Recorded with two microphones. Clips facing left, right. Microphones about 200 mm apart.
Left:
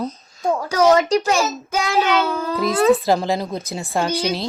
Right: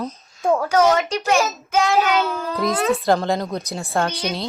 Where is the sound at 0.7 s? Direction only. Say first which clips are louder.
Left 3 dB; 35° left (ahead or behind).